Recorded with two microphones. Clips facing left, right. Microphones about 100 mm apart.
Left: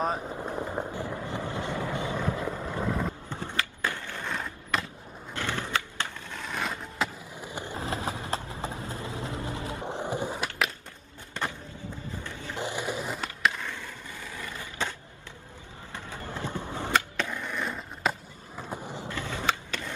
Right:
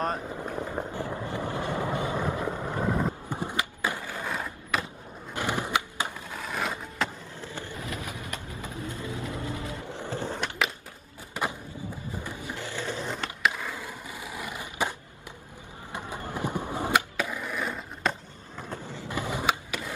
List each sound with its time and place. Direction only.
0.0 s speech: 5° left (ahead or behind)
0.6 s a sound: 5° left (ahead or behind)
1.5 s vehicle: 20° left (ahead or behind)
2.1 s skateboard: 20° right (ahead or behind); by 4.8 s 5° right (ahead or behind)
5.3 s skateboard: 15° right (ahead or behind)
6.3 s a sound: 5° right (ahead or behind)
7.3 s skateboard: 15° left (ahead or behind)
7.7 s vehicle: 30° left (ahead or behind); by 10.7 s 5° left (ahead or behind)
11.4 s skateboard: 10° right (ahead or behind)
12.2 s printer: 15° right (ahead or behind)
12.5 s skateboard: 15° left (ahead or behind)
13.6 s skateboard: 5° right (ahead or behind)
18.6 s vehicle: 15° left (ahead or behind)
19.0 s skateboard: 15° right (ahead or behind)